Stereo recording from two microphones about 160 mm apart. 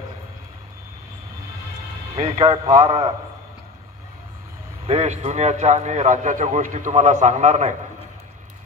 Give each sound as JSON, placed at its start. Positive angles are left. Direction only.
{"t": 2.1, "sound": "a man's voice", "side_deg": -40}
{"t": 4.8, "sound": "a man's voice", "side_deg": -45}